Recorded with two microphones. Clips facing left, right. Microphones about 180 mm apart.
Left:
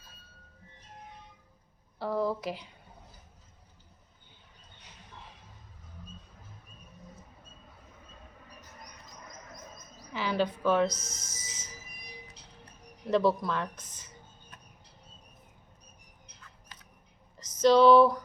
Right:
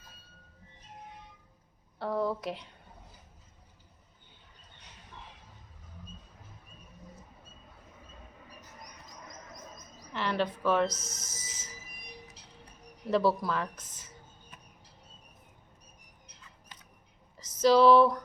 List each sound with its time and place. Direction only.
2.0 s speech: centre (ahead or behind)
10.1 s speech: 5° left (ahead or behind)
13.1 s speech: 5° right (ahead or behind)
17.3 s a sound: 5° right (ahead or behind)